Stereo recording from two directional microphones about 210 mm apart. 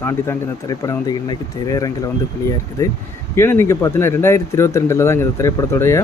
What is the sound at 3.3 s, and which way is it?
Speech, 10° left (ahead or behind).